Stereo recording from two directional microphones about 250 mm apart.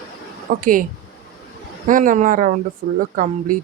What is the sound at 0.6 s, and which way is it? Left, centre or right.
Speech, right.